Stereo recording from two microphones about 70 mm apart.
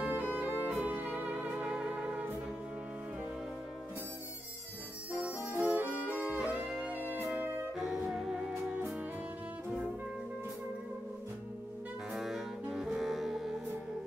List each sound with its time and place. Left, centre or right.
0.0 s music: right
5.5 s music: right; by 7.0 s centre
7.0 s music: right
7.7 s music: centre
12.1 s music: centre